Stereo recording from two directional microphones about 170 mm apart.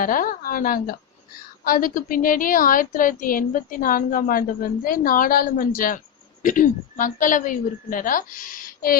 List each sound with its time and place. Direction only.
0.0 s a woman's voice: 55° left (ahead or behind)